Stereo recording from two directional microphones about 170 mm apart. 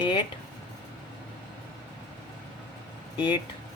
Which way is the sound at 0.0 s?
30° left (ahead or behind).